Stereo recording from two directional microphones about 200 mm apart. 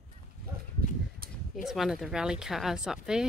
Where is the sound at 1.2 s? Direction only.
45° right (ahead or behind).